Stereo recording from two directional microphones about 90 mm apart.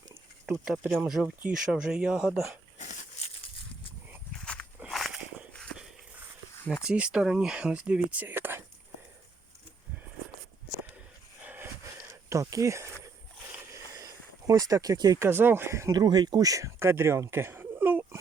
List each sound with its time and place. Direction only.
0.1 s a sound: 30° right (ahead or behind)
1.2 s speech: 15° right (ahead or behind)
4.4 s walk: 10° left (ahead or behind)
4.9 s walk: centre (ahead or behind)
6.8 s speech: 10° right (ahead or behind)
11.4 s wheeze: 25° right (ahead or behind)
12.3 s speech: 35° right (ahead or behind)
13.7 s a sound: 40° right (ahead or behind)
15.2 s speech: 25° right (ahead or behind)
16.0 s speech: 50° right (ahead or behind); by 18.2 s 25° right (ahead or behind)